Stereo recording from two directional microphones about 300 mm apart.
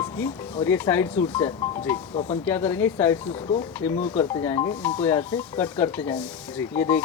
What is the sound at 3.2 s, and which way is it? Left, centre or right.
Speech, centre.